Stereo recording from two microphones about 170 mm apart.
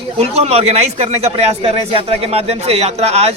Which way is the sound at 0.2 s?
35° right (ahead or behind).